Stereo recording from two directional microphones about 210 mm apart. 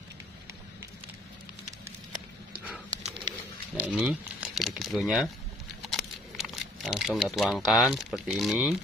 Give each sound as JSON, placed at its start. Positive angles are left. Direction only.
{"t": 3.0, "sound": "dog", "side_deg": -25}
{"t": 3.7, "sound": "a sound", "side_deg": -5}
{"t": 5.9, "sound": "speech", "side_deg": 0}